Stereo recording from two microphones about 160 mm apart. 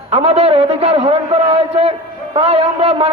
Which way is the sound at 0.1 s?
40° right (ahead or behind).